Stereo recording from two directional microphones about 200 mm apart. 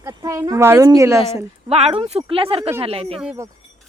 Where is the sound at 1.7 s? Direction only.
30° right (ahead or behind).